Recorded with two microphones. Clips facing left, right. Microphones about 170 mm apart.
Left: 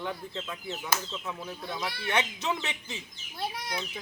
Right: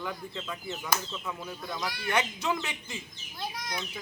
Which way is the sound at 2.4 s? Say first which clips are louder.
Right 1 dB; 20° left (ahead or behind).